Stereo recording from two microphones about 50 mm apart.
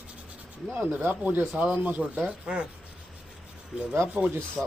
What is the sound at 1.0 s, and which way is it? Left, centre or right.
Speech, right.